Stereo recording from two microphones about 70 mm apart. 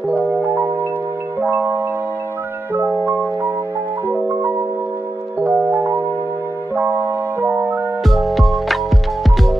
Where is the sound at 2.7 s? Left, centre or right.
Right.